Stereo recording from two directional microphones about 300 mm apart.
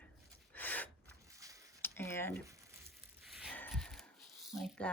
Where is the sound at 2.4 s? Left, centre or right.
Centre.